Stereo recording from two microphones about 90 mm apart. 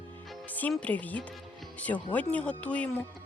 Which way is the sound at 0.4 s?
20° left (ahead or behind).